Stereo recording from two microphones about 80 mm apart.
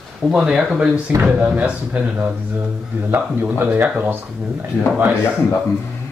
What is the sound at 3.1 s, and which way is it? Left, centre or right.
Speech, right.